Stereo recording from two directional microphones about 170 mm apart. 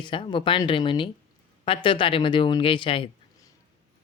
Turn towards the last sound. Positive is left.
turn(degrees=30)  # may be behind; listen again after turning